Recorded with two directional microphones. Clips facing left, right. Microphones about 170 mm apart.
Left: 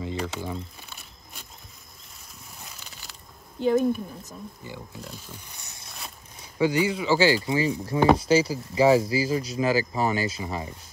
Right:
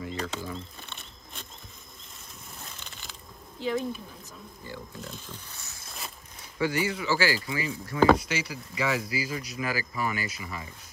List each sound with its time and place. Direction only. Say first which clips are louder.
0.0 s speech: left 3 dB; 20° left (ahead or behind)
0.7 s a sound: right 1 dB; 5° left (ahead or behind)
2.6 s crushing: even; centre (ahead or behind)
4.3 s speech: left 3 dB; 15° left (ahead or behind)
5.9 s a sound: right 1 dB; centre (ahead or behind)
6.6 s speech: left 5 dB; 15° left (ahead or behind)
8.3 s speech: left 12 dB; 35° left (ahead or behind)